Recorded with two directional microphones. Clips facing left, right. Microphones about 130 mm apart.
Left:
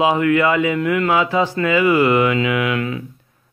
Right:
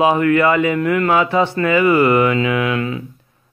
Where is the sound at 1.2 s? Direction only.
60° right (ahead or behind); by 3.0 s 30° right (ahead or behind).